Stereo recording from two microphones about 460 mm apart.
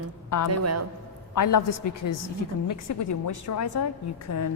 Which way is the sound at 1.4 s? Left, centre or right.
Left.